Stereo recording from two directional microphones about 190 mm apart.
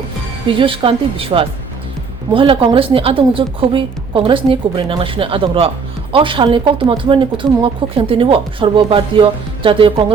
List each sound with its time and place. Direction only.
0.5 s speech: 25° right (ahead or behind)